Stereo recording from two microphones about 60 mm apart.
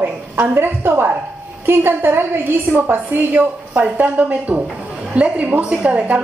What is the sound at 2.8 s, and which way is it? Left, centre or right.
A woman's voice, right.